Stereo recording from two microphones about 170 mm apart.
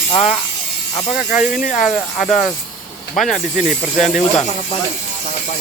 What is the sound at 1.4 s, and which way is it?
Speech, 50° left (ahead or behind).